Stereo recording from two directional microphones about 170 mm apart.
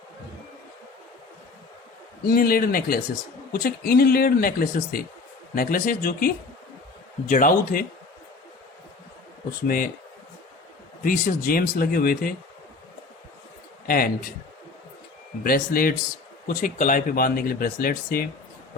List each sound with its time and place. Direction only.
2.2 s speech: 60° left (ahead or behind)
9.6 s speech: 55° left (ahead or behind)
11.0 s speech: 55° left (ahead or behind)
13.8 s speech: 60° left (ahead or behind)
15.4 s speech: 60° left (ahead or behind)